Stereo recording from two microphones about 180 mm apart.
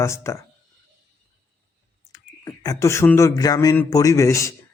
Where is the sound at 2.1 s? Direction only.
20° left (ahead or behind).